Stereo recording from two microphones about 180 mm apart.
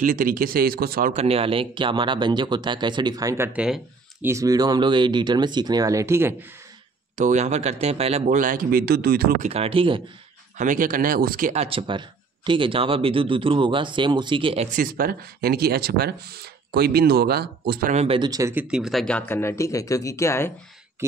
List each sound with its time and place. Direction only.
0.0 s speech: 50° right (ahead or behind)
1.1 s speech: 35° right (ahead or behind); by 4.3 s 5° right (ahead or behind)
4.3 s speech: 20° right (ahead or behind)
7.2 s speech: 40° right (ahead or behind); by 9.4 s 60° right (ahead or behind)
9.4 s speech: 35° right (ahead or behind)
10.6 s speech: 45° right (ahead or behind)
11.5 s speech: 30° right (ahead or behind)
14.7 s speech: 50° right (ahead or behind)
17.9 s speech: 30° right (ahead or behind)
18.5 s speech: 5° right (ahead or behind); by 20.5 s 15° left (ahead or behind)